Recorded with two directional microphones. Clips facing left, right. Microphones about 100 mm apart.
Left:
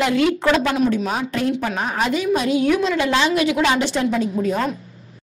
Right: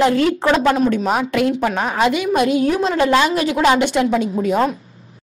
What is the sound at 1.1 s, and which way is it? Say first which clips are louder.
Speech: right 5 dB; 70° right (ahead or behind).